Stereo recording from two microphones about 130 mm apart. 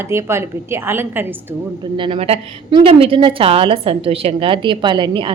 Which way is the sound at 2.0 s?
45° right (ahead or behind).